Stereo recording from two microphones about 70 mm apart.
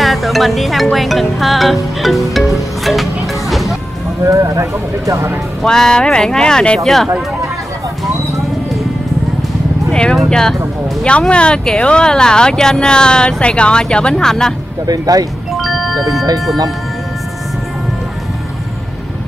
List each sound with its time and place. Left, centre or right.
0.0 s music: centre
4.2 s speech: right
5.6 s speech: centre
6.8 s speech: centre
9.8 s music: centre
11.1 s speech: centre
14.9 s speech: right
15.5 s music: centre